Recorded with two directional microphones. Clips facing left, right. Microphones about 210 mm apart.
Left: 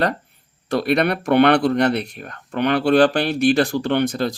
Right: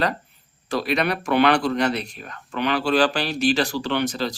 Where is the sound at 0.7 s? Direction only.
55° left (ahead or behind).